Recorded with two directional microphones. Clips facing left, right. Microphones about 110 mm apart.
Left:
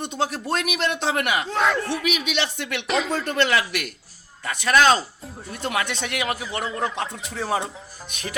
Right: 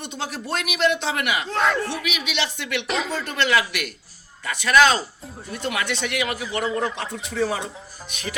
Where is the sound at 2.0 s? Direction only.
45° left (ahead or behind).